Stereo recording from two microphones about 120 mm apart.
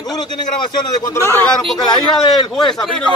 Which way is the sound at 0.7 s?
25° left (ahead or behind).